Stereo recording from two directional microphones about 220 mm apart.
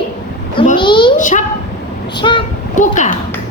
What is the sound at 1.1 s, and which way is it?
Speech, 35° left (ahead or behind).